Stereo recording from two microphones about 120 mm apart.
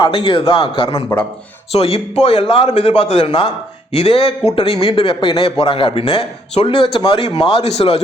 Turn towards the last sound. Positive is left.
turn(degrees=55)  # may be behind; listen again after turning